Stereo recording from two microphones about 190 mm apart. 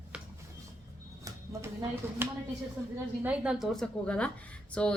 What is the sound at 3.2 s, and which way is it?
A woman's voice, 5° right (ahead or behind).